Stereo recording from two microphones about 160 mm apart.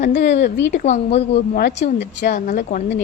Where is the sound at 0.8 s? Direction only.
45° left (ahead or behind).